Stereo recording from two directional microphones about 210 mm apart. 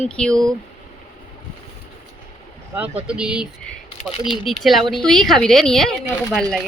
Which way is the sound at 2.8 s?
5° right (ahead or behind).